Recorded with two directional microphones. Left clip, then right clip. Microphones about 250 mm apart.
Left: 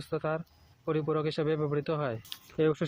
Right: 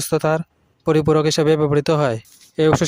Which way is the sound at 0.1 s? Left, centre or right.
Right.